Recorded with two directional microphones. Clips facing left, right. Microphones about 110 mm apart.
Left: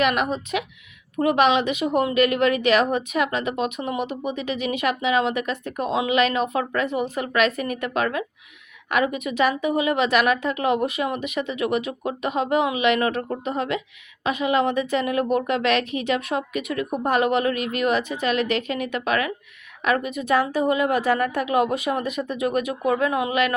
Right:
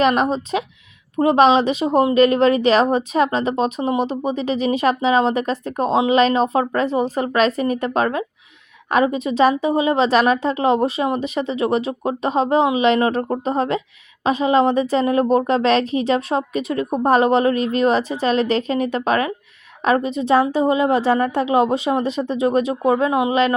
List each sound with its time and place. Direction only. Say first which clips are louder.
0.0 s a woman's voice: right 5 dB; 30° right (ahead or behind)